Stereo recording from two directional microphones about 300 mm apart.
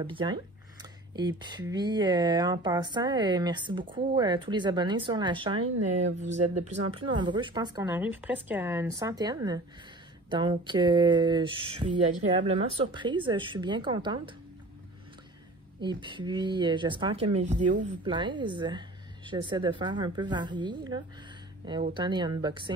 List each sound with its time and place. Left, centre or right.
0.0 s speech: centre
12.0 s speech: right
12.4 s speech: centre
15.8 s speech: centre